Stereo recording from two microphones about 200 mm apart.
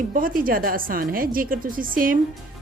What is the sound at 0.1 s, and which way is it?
Speech, 45° right (ahead or behind).